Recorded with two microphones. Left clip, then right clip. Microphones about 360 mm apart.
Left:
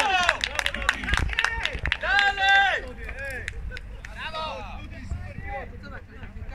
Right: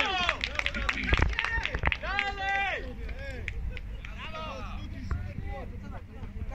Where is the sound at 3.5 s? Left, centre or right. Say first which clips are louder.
Left 4 dB; left.